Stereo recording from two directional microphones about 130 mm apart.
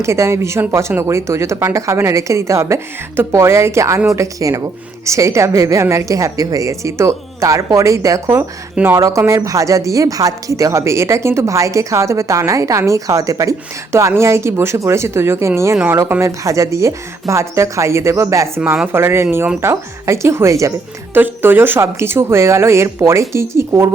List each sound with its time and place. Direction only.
0.0 s a woman's voice: 20° right (ahead or behind)